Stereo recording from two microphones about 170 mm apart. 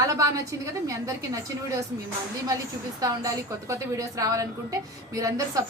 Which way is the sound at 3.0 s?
20° right (ahead or behind).